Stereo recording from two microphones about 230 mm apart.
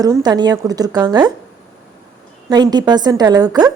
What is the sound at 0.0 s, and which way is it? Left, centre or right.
A woman's voice, centre.